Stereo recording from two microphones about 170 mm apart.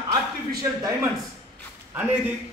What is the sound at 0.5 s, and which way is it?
Speech, 20° right (ahead or behind).